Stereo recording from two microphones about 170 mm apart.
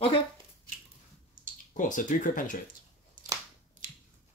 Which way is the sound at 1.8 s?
50° left (ahead or behind).